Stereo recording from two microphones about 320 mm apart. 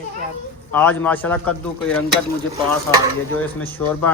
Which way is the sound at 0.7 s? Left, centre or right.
Centre.